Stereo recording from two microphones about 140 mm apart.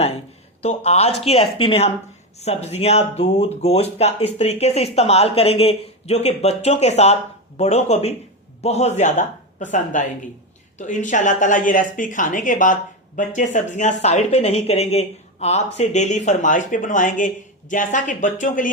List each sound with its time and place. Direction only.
0.6 s a woman's voice: 45° left (ahead or behind); by 18.7 s 70° left (ahead or behind)